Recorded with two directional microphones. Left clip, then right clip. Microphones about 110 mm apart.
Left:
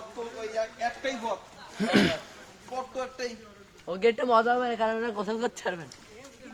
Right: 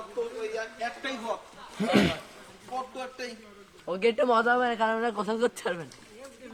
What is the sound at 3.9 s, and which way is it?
Speech, 30° right (ahead or behind).